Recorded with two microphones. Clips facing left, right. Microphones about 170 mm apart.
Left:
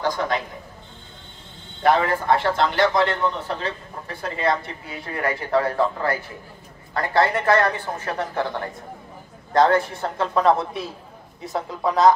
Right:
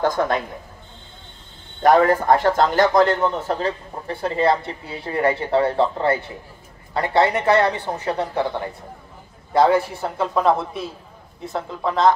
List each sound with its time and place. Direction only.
0.0 s a man's voice: 50° right (ahead or behind)
1.8 s a man's voice: 45° right (ahead or behind); by 12.1 s 5° left (ahead or behind)